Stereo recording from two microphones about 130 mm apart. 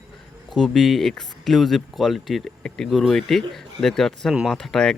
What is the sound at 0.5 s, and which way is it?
Speech, centre (ahead or behind).